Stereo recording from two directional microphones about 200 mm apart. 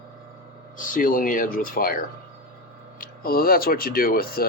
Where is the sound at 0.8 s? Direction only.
40° left (ahead or behind).